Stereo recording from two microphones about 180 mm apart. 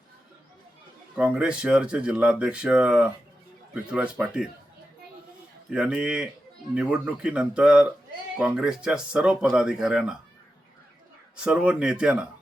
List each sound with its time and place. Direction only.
1.1 s speech: 5° right (ahead or behind)
5.7 s speech: 5° right (ahead or behind)
11.3 s speech: 5° right (ahead or behind)